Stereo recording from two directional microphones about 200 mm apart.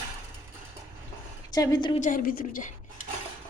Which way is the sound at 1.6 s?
20° left (ahead or behind).